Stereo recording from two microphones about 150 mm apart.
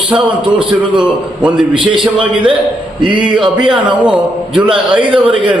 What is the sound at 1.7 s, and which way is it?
Speech, 35° right (ahead or behind).